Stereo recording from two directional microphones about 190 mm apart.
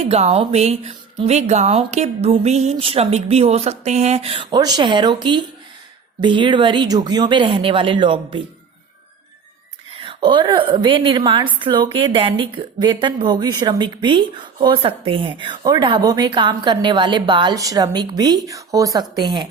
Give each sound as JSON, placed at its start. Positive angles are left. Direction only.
{"t": 0.0, "sound": "a woman's voice", "side_deg": -30}
{"t": 10.0, "sound": "speech", "side_deg": -25}